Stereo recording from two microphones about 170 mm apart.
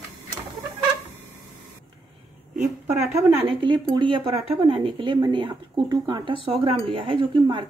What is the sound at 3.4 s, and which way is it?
A woman's voice, 30° right (ahead or behind).